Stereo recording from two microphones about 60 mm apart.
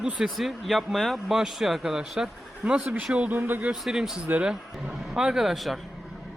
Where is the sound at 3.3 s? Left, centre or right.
Right.